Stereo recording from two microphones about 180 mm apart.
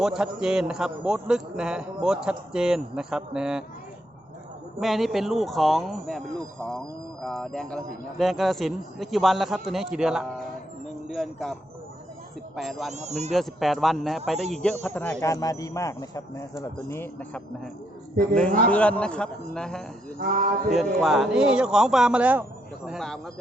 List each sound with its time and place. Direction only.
0.0 s a man's voice: 5° right (ahead or behind)
4.8 s a man's voice: centre (ahead or behind)
12.5 s a man's voice: centre (ahead or behind)
12.9 s speech: 40° right (ahead or behind)
13.3 s a man's voice: centre (ahead or behind)
15.2 s speech: 20° left (ahead or behind)
18.7 s a man's voice: 5° left (ahead or behind)
20.1 s speech: 50° right (ahead or behind)
20.7 s a man's voice: centre (ahead or behind)